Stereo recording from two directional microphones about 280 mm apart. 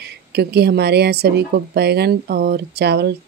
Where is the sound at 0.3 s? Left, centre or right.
Right.